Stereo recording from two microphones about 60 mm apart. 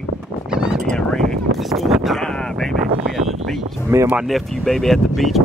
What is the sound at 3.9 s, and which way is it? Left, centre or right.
Speech, right.